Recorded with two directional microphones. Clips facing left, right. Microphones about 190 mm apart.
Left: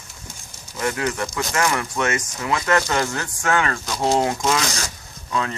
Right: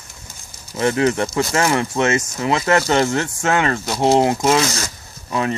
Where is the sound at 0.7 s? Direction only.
25° right (ahead or behind).